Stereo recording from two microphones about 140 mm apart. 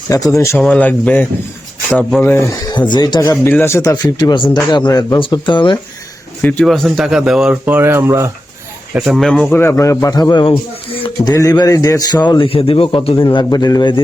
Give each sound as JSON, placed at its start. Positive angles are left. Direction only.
{"t": 0.1, "sound": "speech", "side_deg": 25}
{"t": 0.5, "sound": "speech", "side_deg": 5}
{"t": 2.6, "sound": "speech", "side_deg": 30}
{"t": 6.4, "sound": "speech", "side_deg": 5}
{"t": 7.5, "sound": "speech", "side_deg": -15}
{"t": 8.9, "sound": "speech", "side_deg": -5}
{"t": 9.5, "sound": "a man's voice", "side_deg": 15}
{"t": 13.3, "sound": "speech", "side_deg": 30}